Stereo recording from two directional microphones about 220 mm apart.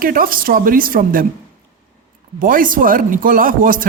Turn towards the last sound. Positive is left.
turn(degrees=-40)  # may be behind; listen again after turning